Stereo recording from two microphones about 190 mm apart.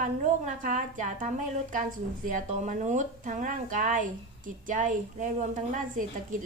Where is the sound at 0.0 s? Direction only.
40° right (ahead or behind).